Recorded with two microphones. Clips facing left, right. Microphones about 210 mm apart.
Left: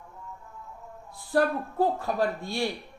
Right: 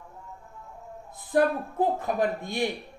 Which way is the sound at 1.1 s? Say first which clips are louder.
Right 1 dB; 20° right (ahead or behind).